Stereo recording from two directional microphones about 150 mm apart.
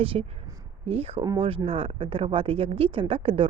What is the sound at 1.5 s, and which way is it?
Speech, 40° right (ahead or behind).